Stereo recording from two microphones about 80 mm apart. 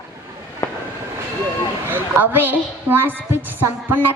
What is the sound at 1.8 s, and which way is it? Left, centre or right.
A woman's voice, right.